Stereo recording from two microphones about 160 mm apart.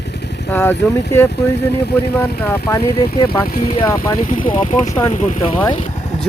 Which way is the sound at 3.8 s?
20° left (ahead or behind).